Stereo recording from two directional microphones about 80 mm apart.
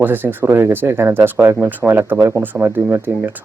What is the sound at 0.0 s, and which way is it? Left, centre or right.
Speech, right.